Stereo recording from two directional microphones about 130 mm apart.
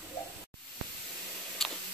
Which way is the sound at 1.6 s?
5° left (ahead or behind).